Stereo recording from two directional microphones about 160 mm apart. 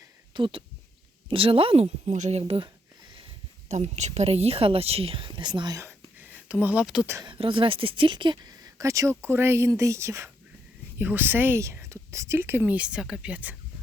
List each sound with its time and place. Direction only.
0.3 s a woman's voice: 35° right (ahead or behind)
3.7 s a woman's voice: 45° right (ahead or behind); by 5.9 s 25° right (ahead or behind)
6.1 s speech: 10° right (ahead or behind)
7.2 s a woman's voice: 30° right (ahead or behind); by 13.6 s 10° right (ahead or behind)